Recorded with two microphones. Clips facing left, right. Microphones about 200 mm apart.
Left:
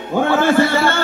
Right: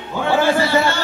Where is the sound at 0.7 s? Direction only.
55° left (ahead or behind).